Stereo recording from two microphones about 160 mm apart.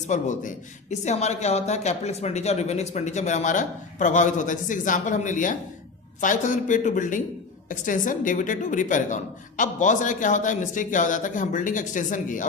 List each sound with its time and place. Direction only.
0.1 s speech: 50° left (ahead or behind)